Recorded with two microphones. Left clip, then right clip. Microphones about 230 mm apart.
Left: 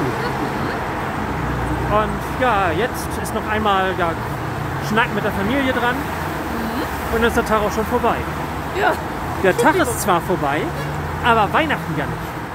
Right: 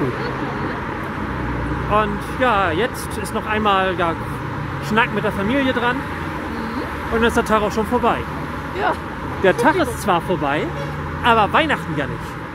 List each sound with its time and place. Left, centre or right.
2.0 s speech: right
7.2 s speech: right
9.4 s speech: centre